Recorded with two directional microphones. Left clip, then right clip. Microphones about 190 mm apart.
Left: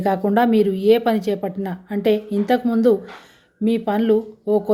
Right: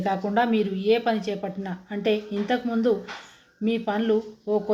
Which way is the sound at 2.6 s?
40° left (ahead or behind).